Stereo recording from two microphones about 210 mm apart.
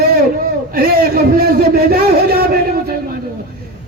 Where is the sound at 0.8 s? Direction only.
45° right (ahead or behind).